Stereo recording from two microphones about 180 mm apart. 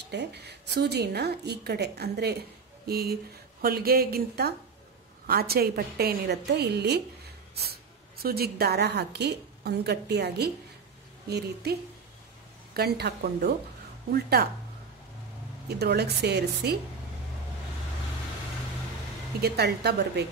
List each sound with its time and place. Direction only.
0.0 s a woman's voice: 70° right (ahead or behind)
12.7 s a woman's voice: 65° right (ahead or behind)
15.7 s a woman's voice: 65° right (ahead or behind)
19.4 s a woman's voice: 60° right (ahead or behind)